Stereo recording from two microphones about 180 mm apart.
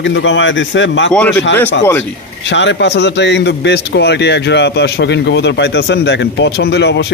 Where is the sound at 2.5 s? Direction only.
80° left.